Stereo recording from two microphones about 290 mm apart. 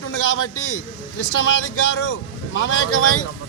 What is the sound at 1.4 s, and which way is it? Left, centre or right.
A man's voice, left.